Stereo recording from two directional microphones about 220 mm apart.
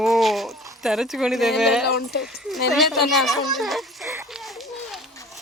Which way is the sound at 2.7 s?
Centre (ahead or behind).